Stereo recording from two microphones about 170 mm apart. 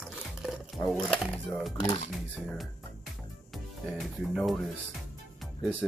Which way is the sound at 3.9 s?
Centre (ahead or behind).